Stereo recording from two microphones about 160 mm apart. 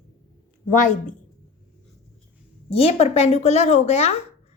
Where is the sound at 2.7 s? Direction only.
40° left (ahead or behind).